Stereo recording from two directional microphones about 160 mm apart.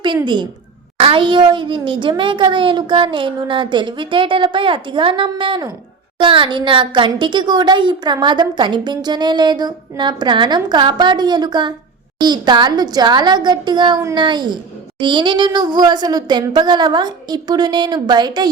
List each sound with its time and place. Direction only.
0.9 s a woman's voice: 35° right (ahead or behind)